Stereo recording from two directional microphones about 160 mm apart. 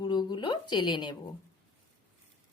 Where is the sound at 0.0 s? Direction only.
25° left (ahead or behind).